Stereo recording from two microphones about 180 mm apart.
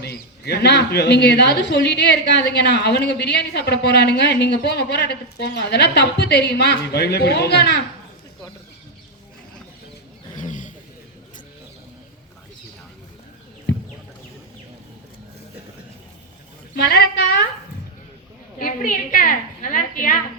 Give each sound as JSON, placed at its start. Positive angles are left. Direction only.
{"t": 0.0, "sound": "speech", "side_deg": 65}
{"t": 10.3, "sound": "vehicle", "side_deg": 45}
{"t": 16.7, "sound": "a woman's voice", "side_deg": 65}
{"t": 18.6, "sound": "a woman's voice", "side_deg": 50}